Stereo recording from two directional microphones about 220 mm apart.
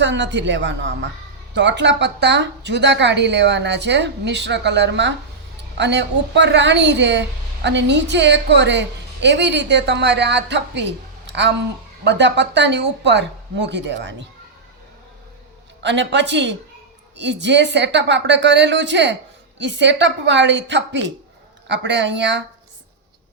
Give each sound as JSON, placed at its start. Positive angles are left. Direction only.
{"t": 0.0, "sound": "a woman's voice", "side_deg": -55}
{"t": 15.8, "sound": "a woman's voice", "side_deg": -50}